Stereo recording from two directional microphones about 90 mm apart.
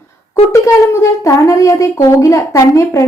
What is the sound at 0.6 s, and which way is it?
A woman's voice, 35° left (ahead or behind).